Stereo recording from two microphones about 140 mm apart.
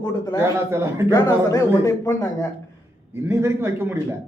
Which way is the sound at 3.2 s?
20° right (ahead or behind).